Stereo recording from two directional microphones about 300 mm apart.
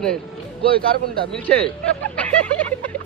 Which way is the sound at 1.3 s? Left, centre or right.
Centre.